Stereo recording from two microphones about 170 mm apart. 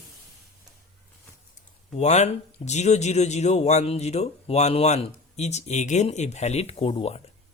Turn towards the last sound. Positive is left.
turn(degrees=35)  # may be behind; listen again after turning